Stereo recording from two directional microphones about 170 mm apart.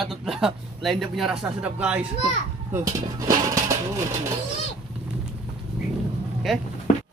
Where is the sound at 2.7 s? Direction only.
20° right (ahead or behind).